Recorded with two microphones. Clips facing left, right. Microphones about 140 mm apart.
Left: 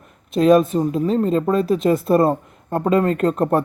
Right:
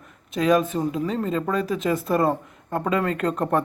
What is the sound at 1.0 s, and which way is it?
Speech, 25° left (ahead or behind).